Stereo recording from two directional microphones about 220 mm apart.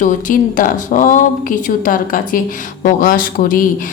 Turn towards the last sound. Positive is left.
turn(degrees=40)  # may be behind; listen again after turning